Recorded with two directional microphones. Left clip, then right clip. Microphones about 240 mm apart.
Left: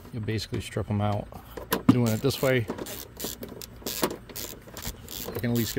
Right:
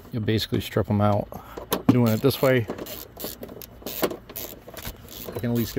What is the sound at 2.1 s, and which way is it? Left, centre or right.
Speech, centre.